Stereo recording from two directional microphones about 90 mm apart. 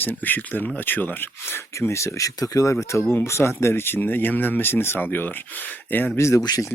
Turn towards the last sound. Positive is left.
turn(degrees=45)  # may be behind; listen again after turning